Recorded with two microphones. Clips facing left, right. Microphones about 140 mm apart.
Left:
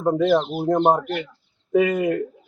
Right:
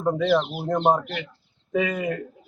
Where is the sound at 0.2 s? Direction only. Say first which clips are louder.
Left 3 dB; 45° left (ahead or behind).